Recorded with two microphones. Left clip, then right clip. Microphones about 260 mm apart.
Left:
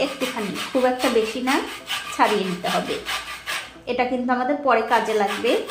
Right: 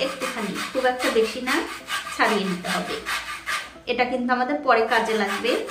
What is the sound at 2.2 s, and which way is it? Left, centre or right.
Speech, left.